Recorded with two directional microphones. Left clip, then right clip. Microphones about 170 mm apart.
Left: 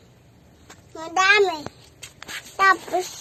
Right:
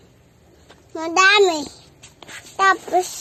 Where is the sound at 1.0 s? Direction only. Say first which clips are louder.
Right 5 dB; 50° right (ahead or behind).